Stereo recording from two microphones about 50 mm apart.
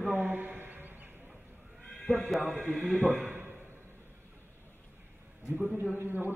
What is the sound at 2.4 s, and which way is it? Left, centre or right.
Speech, right.